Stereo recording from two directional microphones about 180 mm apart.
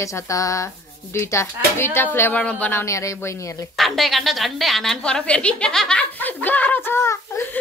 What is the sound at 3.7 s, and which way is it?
A woman's voice, centre (ahead or behind).